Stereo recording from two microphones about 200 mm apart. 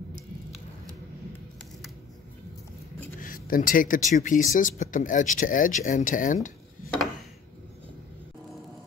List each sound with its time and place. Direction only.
3.2 s speech: 45° left (ahead or behind)